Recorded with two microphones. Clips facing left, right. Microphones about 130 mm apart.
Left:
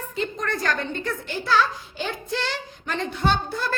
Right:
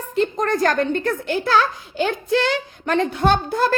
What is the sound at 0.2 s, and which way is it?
A child's voice, 45° right (ahead or behind).